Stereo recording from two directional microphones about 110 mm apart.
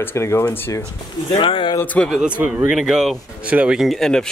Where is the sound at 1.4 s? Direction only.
50° left (ahead or behind).